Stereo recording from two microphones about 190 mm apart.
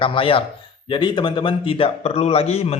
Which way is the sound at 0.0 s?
30° left (ahead or behind).